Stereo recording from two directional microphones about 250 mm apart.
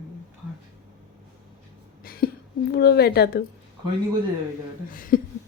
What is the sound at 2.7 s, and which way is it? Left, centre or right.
Speech, left.